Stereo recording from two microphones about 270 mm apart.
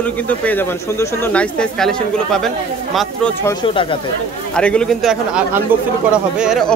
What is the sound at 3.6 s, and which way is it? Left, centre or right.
Speech, centre.